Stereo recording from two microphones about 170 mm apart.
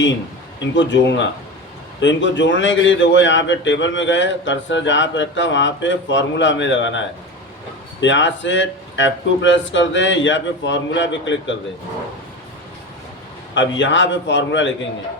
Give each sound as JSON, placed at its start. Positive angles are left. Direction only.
{"t": 0.6, "sound": "a man's voice", "side_deg": 90}
{"t": 8.0, "sound": "a man's voice", "side_deg": 90}
{"t": 13.5, "sound": "a man's voice", "side_deg": 90}